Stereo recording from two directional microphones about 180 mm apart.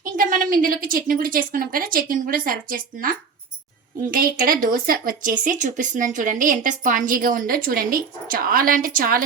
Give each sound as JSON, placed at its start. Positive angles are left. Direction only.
{"t": 0.0, "sound": "speech", "side_deg": -50}